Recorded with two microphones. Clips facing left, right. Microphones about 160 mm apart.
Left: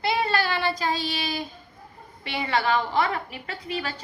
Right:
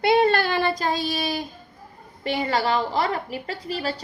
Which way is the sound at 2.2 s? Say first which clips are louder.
Right 2 dB; 40° right (ahead or behind).